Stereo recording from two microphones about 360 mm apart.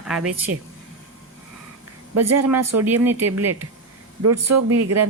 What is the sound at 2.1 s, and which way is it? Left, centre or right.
A woman's voice, right.